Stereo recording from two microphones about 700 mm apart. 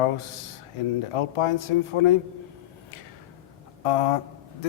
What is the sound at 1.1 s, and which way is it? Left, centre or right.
Speech, left.